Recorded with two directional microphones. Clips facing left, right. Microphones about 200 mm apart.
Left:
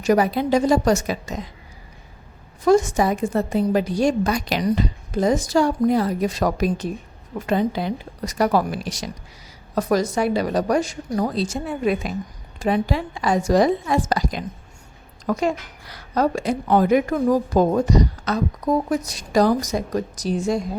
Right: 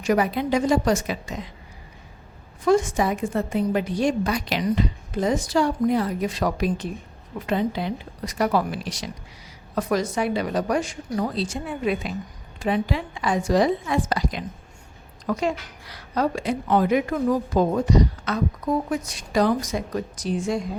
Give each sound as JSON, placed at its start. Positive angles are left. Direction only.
{"t": 0.0, "sound": "speech", "side_deg": 35}
{"t": 2.6, "sound": "a woman's voice", "side_deg": 40}